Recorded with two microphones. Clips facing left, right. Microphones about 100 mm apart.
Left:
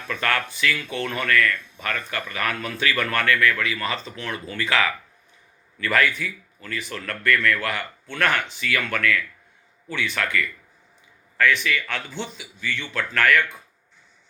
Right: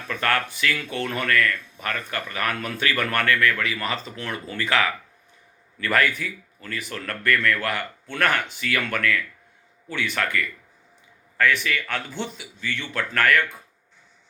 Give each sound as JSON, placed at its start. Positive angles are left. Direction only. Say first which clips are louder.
{"t": 0.1, "sound": "speech", "louder": "right 1 dB", "side_deg": -40}